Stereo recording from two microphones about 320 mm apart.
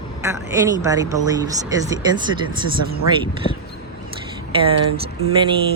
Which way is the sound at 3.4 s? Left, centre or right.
Left.